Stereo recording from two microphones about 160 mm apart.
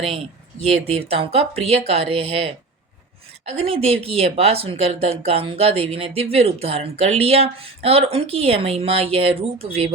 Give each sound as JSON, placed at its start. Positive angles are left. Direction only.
{"t": 0.6, "sound": "speech", "side_deg": -40}